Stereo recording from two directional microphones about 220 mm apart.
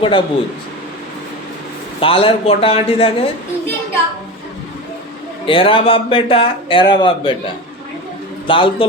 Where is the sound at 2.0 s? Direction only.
25° left (ahead or behind).